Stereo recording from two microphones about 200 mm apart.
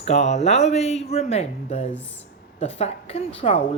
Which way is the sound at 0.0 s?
35° left (ahead or behind).